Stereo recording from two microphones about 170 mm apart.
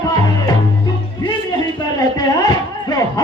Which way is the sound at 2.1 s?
20° left (ahead or behind).